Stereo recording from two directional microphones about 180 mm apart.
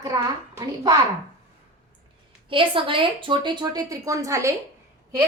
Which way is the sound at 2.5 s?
30° right (ahead or behind).